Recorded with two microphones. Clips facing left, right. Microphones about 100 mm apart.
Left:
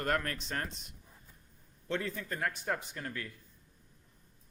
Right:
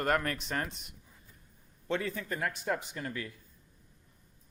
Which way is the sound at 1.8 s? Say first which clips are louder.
Right 2 dB; 70° right (ahead or behind).